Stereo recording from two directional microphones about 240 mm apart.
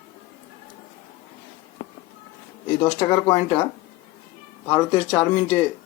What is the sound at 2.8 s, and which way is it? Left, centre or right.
Speech, centre.